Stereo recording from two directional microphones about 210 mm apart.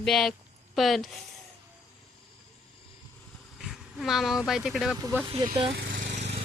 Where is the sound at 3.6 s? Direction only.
Centre (ahead or behind).